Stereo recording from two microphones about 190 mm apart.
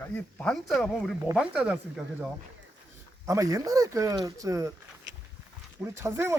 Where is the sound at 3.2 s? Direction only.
15° right (ahead or behind).